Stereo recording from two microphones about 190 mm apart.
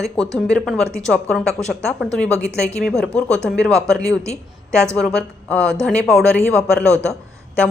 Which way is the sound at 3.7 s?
15° right (ahead or behind).